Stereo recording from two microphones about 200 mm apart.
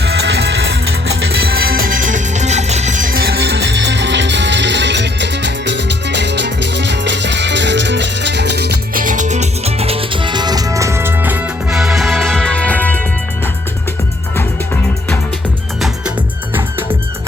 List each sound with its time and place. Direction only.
0.0 s music: 55° right (ahead or behind); by 13.0 s 10° left (ahead or behind)
15.8 s music: 10° right (ahead or behind)